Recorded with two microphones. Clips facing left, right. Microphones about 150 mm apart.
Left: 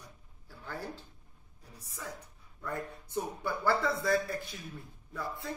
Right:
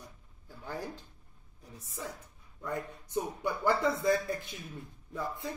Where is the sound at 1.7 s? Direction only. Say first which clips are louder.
Right 2 dB; 20° right (ahead or behind).